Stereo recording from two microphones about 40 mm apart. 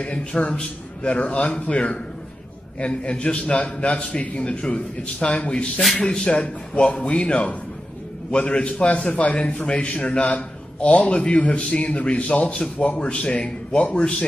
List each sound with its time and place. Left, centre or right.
0.0 s a man's voice: left